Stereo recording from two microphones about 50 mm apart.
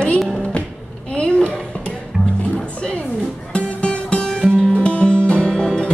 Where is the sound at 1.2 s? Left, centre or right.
Centre.